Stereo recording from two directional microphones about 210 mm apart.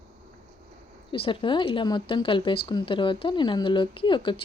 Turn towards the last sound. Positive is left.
turn(degrees=25)  # may be behind; listen again after turning